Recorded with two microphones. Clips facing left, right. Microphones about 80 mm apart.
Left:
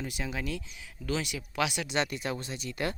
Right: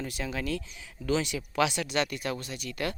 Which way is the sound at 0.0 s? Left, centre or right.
Centre.